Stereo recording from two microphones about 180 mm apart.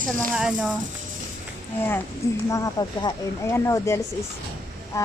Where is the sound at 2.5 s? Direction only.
20° left (ahead or behind).